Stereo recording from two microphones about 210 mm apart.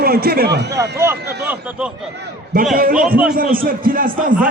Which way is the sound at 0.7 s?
15° right (ahead or behind).